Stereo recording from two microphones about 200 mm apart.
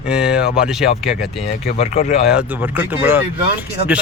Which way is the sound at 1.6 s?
30° left (ahead or behind).